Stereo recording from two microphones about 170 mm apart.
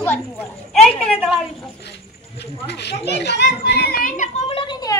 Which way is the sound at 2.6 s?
85° left.